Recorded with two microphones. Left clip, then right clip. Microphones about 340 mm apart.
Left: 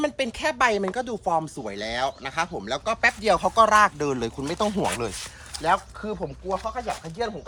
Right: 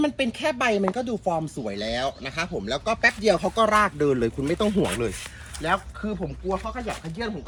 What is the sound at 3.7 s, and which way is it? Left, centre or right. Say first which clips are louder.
Speech: left 1 dB; centre.